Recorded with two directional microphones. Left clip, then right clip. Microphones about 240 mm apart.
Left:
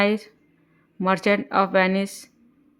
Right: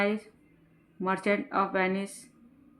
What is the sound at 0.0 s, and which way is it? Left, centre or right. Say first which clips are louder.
A woman's voice: left 7 dB; left.